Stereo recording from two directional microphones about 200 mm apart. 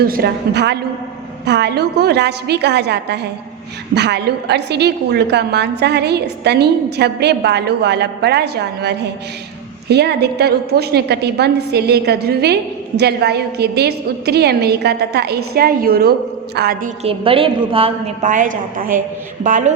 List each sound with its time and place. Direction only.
0.1 s a woman's voice: 55° right (ahead or behind)
17.0 s a woman's voice: 30° right (ahead or behind)